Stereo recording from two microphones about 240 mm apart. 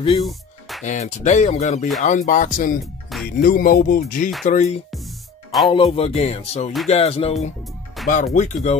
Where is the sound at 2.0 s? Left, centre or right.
Left.